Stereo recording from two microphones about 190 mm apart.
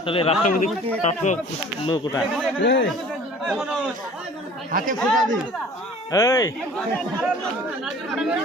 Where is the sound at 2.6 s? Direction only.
70° left (ahead or behind).